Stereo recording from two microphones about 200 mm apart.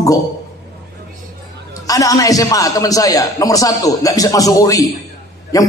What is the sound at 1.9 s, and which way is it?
A man's voice, 15° left (ahead or behind).